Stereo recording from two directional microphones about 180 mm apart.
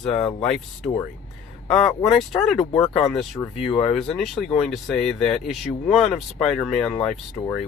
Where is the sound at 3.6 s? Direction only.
30° left (ahead or behind).